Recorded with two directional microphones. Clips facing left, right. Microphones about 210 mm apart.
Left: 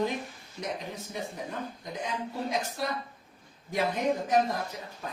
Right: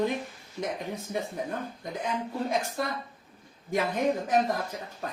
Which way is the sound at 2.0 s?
55° right (ahead or behind).